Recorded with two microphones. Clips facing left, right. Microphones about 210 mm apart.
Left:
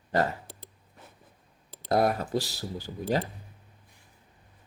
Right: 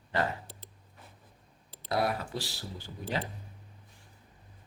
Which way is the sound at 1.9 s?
45° left (ahead or behind).